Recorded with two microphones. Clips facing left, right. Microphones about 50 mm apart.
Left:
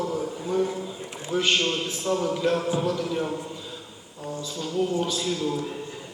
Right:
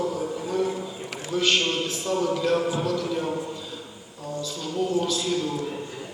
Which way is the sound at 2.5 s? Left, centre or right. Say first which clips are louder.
Right 1 dB; centre.